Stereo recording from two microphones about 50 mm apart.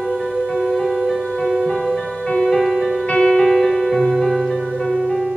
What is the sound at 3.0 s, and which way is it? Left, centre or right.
Music, centre.